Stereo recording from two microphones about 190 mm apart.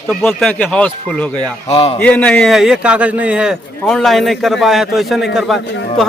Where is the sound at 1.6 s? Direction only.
30° left (ahead or behind).